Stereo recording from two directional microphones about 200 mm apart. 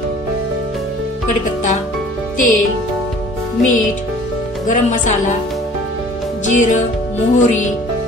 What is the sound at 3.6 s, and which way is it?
Speech, 40° left (ahead or behind).